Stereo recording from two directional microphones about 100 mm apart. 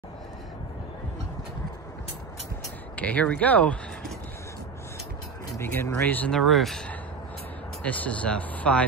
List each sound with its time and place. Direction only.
3.0 s speech: 15° left (ahead or behind)
5.6 s speech: 20° left (ahead or behind)
6.3 s speech: centre (ahead or behind)
7.8 s speech: 15° left (ahead or behind)